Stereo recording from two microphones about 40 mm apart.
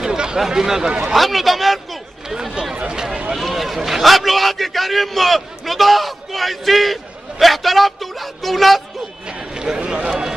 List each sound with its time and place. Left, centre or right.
0.0 s a sound: centre
0.5 s speech: centre
1.1 s a man's voice: centre
2.2 s speech: centre
3.3 s a man's voice: centre
9.3 s run: centre
10.0 s a man's voice: centre